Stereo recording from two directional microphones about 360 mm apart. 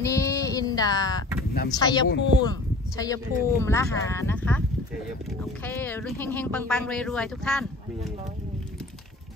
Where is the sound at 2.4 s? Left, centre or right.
Centre.